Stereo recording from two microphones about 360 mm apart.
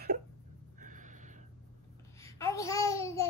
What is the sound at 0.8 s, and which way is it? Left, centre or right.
Gasp, right.